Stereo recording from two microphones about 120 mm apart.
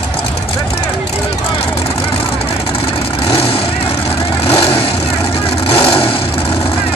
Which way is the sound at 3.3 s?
50° left (ahead or behind).